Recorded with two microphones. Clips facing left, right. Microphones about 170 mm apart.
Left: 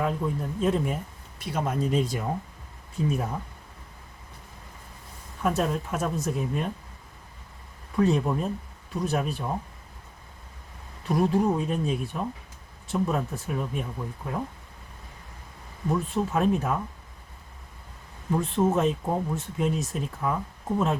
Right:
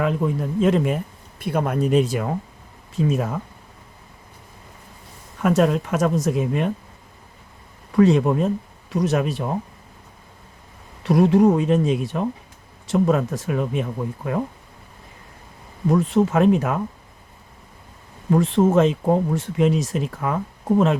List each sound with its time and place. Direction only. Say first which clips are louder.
0.0 s speech: right 6 dB; 90° right
1.4 s speech: right 6 dB; 55° right (ahead or behind); by 2.3 s 80° right
2.9 s speech: right 6 dB; 90° right
5.4 s speech: right 8 dB; 90° right
7.9 s speech: right 7 dB; 90° right
11.0 s speech: right 8 dB; 80° right
15.9 s speech: right 8 dB; 90° right
18.3 s speech: right 7 dB; 90° right